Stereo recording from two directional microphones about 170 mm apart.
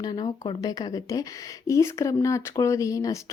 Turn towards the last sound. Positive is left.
turn(degrees=20)  # may be behind; listen again after turning